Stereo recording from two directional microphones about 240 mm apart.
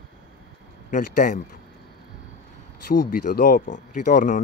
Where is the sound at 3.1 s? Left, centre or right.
Left.